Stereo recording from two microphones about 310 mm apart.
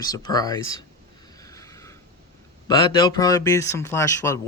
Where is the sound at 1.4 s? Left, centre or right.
Centre.